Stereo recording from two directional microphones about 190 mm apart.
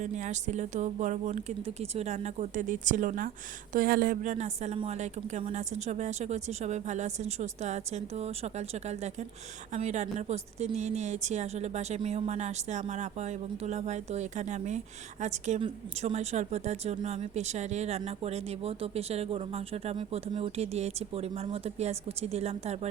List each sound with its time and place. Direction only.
0.0 s speech: 40° right (ahead or behind)